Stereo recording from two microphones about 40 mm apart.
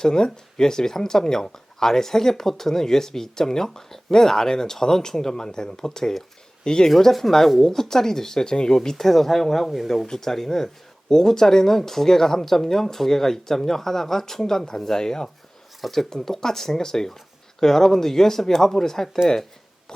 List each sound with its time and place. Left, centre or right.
0.0 s speech: centre
6.9 s speech: centre